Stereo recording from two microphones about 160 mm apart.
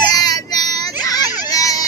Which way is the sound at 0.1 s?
25° left (ahead or behind).